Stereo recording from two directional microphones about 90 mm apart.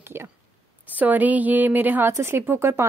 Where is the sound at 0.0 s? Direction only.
25° right (ahead or behind).